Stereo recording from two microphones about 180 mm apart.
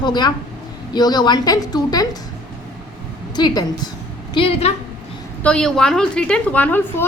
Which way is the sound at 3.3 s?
25° left (ahead or behind).